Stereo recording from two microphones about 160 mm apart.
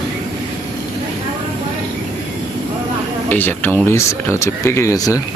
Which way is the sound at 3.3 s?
10° left (ahead or behind).